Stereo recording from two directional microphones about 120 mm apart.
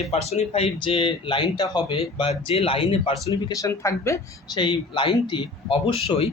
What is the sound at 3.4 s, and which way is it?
Speech, 30° left (ahead or behind).